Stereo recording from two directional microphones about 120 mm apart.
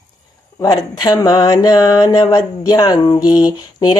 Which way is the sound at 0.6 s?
30° left (ahead or behind).